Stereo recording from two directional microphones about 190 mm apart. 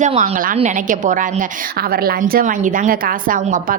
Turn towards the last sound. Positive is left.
turn(degrees=-45)  # may be behind; listen again after turning